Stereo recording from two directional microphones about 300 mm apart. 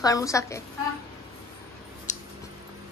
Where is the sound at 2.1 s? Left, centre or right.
Left.